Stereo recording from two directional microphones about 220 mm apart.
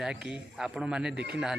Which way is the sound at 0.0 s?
5° right (ahead or behind).